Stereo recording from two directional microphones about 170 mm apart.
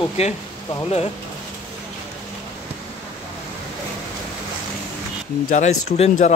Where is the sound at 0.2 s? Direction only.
40° left (ahead or behind).